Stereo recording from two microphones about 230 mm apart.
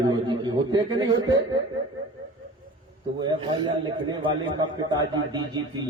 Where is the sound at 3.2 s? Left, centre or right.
Centre.